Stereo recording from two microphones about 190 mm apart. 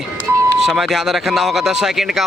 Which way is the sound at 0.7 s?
Centre (ahead or behind).